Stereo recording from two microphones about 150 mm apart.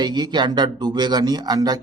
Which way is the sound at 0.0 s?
30° right (ahead or behind).